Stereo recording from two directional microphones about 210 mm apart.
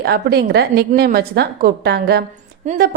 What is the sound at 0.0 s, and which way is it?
A woman's voice, 50° right (ahead or behind).